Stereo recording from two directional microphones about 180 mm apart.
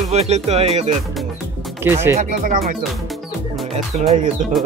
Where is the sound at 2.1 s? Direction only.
45° right (ahead or behind).